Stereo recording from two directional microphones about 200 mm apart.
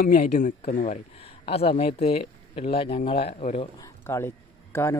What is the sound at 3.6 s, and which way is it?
Speech, 15° left (ahead or behind).